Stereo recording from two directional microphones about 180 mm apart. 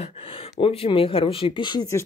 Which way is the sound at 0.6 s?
30° left (ahead or behind).